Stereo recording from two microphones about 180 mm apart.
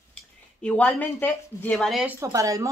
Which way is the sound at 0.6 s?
10° left (ahead or behind).